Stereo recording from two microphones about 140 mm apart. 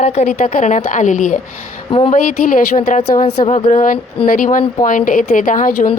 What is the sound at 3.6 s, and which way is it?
A woman's voice, 70° left (ahead or behind).